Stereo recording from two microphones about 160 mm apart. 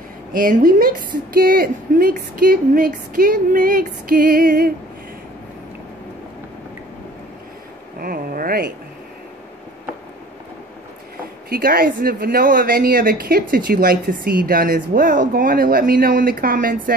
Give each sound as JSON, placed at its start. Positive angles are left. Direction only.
{"t": 0.3, "sound": "speech", "side_deg": -60}
{"t": 8.0, "sound": "speech", "side_deg": -65}
{"t": 11.4, "sound": "speech", "side_deg": -70}